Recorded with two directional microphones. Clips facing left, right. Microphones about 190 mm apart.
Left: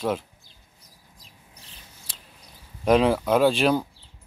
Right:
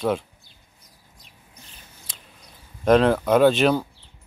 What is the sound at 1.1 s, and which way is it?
Rub, 30° left (ahead or behind).